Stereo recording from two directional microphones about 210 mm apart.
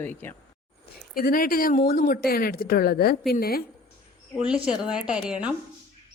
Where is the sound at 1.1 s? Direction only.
45° left (ahead or behind).